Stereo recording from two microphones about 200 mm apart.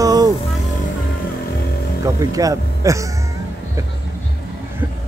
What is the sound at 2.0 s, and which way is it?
Speech, 15° right (ahead or behind).